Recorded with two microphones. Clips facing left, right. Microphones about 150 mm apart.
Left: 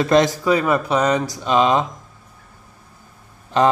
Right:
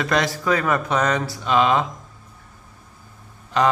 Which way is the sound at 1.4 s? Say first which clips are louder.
Left 1 dB; 25° left (ahead or behind).